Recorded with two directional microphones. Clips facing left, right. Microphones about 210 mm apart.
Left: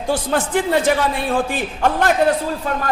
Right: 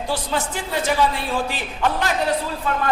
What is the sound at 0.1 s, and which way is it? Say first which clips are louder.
A man's voice: left 7 dB; 55° left (ahead or behind).